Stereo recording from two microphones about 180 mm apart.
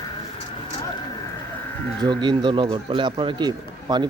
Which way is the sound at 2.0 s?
25° right (ahead or behind).